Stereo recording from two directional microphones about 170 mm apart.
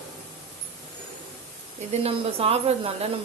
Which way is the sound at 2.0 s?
35° right (ahead or behind).